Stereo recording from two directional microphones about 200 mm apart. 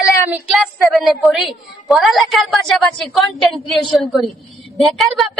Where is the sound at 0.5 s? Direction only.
Centre (ahead or behind).